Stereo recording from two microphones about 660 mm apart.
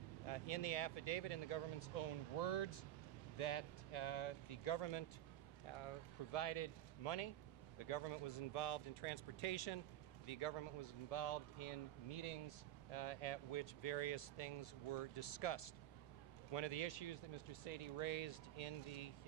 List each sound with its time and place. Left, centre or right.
0.3 s speech: left
5.7 s speech: left